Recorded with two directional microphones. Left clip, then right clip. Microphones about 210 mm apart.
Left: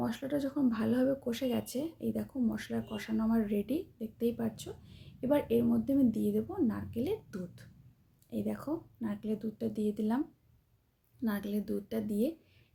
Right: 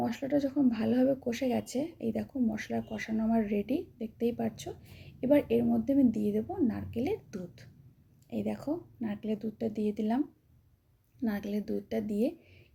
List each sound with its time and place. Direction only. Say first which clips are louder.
0.1 s speech: right 4 dB; 5° left (ahead or behind)
1.8 s speech: right 2 dB; 50° left (ahead or behind)
2.1 s a woman's voice: right 2 dB; 5° left (ahead or behind)
4.9 s a sound: right 4 dB; 45° left (ahead or behind)
5.3 s speech: right 4 dB; 50° left (ahead or behind)
5.5 s speech: right 2 dB; 5° left (ahead or behind)
11.2 s speech: right 1 dB; 5° left (ahead or behind)